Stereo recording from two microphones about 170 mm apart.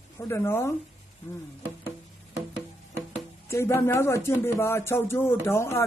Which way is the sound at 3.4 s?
15° left (ahead or behind).